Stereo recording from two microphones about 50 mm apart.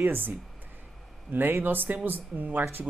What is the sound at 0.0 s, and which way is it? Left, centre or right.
Speech, right.